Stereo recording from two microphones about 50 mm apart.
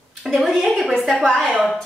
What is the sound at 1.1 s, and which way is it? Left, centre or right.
Speech, centre.